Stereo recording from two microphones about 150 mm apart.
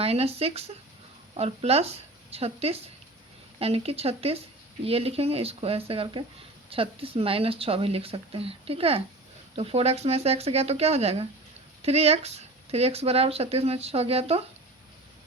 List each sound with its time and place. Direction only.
0.0 s speech: 40° right (ahead or behind)